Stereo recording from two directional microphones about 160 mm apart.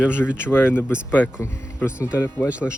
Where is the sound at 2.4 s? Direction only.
10° right (ahead or behind).